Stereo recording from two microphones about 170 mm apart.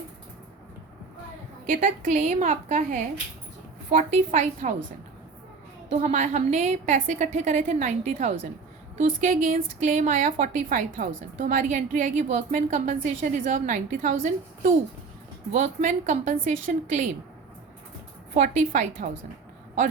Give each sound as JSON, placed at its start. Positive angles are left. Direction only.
{"t": 1.6, "sound": "a woman's voice", "side_deg": -50}
{"t": 5.9, "sound": "a woman's voice", "side_deg": -40}
{"t": 18.3, "sound": "a woman's voice", "side_deg": -50}